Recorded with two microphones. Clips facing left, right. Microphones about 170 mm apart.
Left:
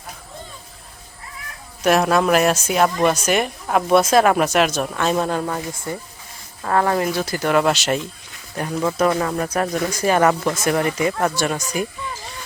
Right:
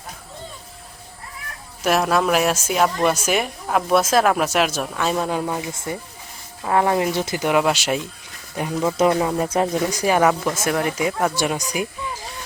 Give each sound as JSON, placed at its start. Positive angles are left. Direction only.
{"t": 1.8, "sound": "a woman's voice", "side_deg": 0}